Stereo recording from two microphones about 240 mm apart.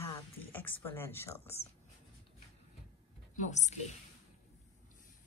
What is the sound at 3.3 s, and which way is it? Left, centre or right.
Speech, left.